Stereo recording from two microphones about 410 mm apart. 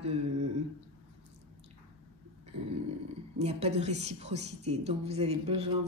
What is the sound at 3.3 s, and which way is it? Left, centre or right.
A woman's voice, centre.